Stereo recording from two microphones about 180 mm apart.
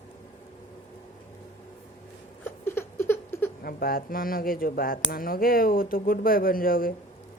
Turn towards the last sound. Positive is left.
turn(degrees=50)  # may be behind; listen again after turning